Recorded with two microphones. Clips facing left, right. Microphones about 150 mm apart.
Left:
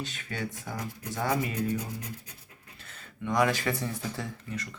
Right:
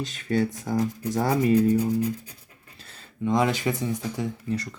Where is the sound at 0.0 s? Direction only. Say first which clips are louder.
Right 11 dB; 35° right (ahead or behind); by 4.3 s 20° right (ahead or behind).